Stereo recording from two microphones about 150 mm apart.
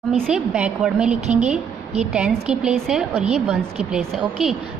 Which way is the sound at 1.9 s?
45° right (ahead or behind).